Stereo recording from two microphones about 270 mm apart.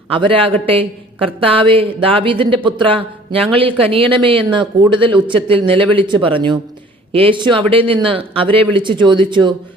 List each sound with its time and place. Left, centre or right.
0.1 s speech: centre